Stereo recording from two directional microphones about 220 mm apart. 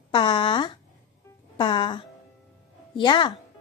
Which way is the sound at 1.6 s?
25° left (ahead or behind).